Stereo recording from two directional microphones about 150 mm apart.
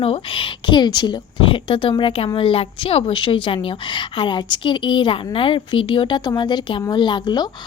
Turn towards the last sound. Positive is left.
turn(degrees=30)  # may be behind; listen again after turning